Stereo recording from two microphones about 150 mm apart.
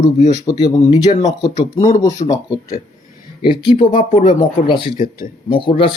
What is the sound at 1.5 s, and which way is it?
Speech, 50° left (ahead or behind).